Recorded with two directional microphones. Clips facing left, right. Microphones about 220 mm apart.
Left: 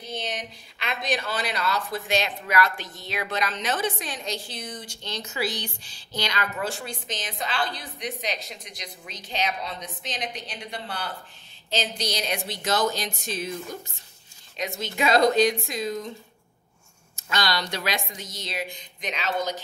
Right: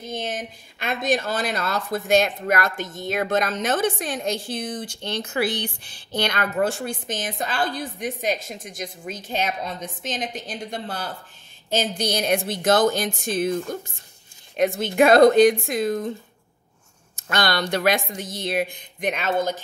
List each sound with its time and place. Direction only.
0.0 s speech: 50° right (ahead or behind)
14.6 s speech: 55° right (ahead or behind)
17.1 s speech: 55° right (ahead or behind)